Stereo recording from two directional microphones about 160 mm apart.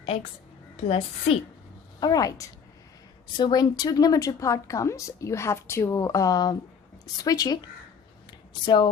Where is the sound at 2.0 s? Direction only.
25° left (ahead or behind).